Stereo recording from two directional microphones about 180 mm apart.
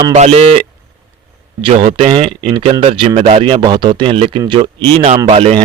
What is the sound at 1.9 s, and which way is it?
Speech, 35° right (ahead or behind).